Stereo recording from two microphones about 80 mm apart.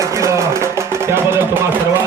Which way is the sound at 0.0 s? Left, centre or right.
Right.